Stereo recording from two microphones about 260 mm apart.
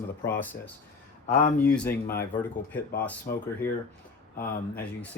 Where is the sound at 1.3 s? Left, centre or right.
Left.